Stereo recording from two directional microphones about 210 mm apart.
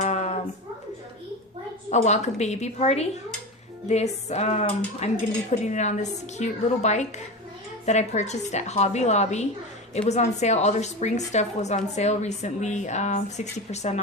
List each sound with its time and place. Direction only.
0.0 s music: 30° left (ahead or behind)
1.9 s a woman's voice: 35° left (ahead or behind)